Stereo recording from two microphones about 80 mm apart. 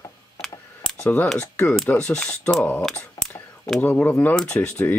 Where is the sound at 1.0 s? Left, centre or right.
Left.